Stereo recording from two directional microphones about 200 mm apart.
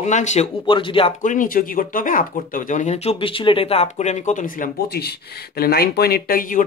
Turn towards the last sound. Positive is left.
turn(degrees=45)  # may be behind; listen again after turning